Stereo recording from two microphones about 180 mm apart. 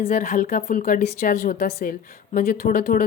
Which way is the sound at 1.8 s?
45° left (ahead or behind).